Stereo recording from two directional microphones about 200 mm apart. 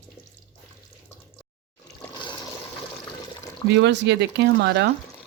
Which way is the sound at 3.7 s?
60° right (ahead or behind).